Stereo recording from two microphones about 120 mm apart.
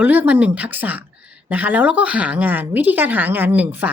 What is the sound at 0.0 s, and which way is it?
A woman's voice, 15° right (ahead or behind).